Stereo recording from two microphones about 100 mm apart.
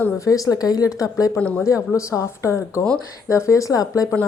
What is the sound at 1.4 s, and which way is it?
Speech, 10° left (ahead or behind).